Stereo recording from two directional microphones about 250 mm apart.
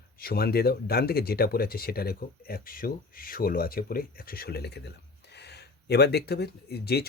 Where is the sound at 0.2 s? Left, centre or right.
Left.